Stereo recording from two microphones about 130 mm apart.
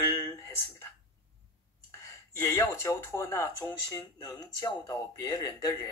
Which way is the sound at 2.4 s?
20° left (ahead or behind).